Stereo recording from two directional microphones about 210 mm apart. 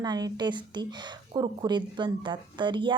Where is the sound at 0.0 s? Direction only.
20° right (ahead or behind).